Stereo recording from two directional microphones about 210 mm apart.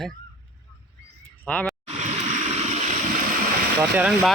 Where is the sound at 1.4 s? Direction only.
5° left (ahead or behind).